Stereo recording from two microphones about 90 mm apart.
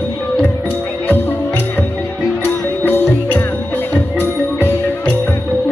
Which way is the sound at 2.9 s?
20° left (ahead or behind).